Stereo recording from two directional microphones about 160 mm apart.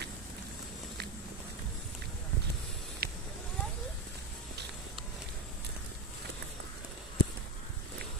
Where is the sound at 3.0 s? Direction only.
75° right (ahead or behind).